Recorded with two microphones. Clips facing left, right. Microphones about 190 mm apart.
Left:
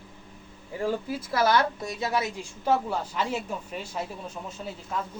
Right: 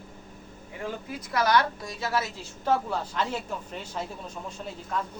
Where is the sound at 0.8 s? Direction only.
30° left (ahead or behind).